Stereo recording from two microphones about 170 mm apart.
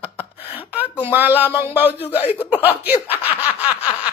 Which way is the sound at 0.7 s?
10° right (ahead or behind).